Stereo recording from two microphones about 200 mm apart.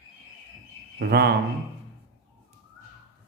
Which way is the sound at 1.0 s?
50° right (ahead or behind).